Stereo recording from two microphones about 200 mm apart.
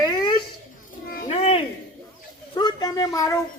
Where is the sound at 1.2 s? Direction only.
30° left (ahead or behind).